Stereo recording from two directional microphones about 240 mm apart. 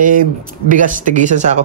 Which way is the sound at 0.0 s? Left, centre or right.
Right.